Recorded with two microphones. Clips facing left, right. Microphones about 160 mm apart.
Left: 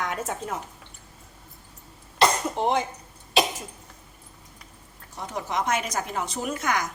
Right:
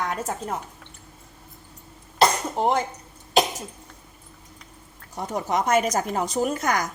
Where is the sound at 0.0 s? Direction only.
35° right (ahead or behind).